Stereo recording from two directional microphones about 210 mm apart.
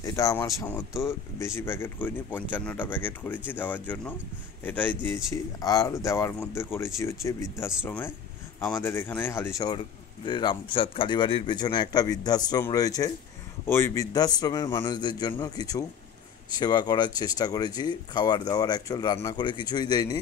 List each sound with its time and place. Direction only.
0.0 s a man's voice: 15° left (ahead or behind)